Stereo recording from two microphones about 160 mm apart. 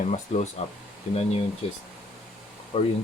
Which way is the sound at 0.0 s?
45° left (ahead or behind).